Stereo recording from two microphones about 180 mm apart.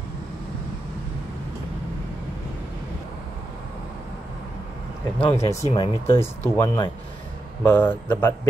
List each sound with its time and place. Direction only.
5.2 s speech: 35° left (ahead or behind)
5.5 s speech: 20° left (ahead or behind)